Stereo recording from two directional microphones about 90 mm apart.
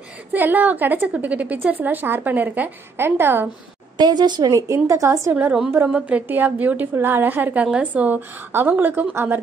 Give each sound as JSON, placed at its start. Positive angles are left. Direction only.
{"t": 0.3, "sound": "a woman's voice", "side_deg": -20}
{"t": 4.0, "sound": "a woman's voice", "side_deg": -55}
{"t": 5.3, "sound": "a woman's voice", "side_deg": -15}